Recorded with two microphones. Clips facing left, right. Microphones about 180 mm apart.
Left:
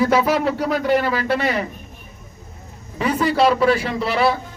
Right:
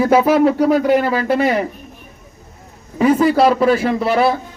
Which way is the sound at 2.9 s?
45° right (ahead or behind).